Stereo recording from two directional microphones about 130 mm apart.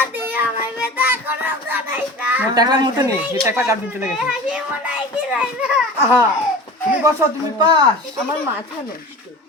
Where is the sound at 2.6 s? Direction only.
30° right (ahead or behind).